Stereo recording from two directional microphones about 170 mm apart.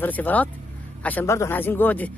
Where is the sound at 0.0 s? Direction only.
10° left (ahead or behind).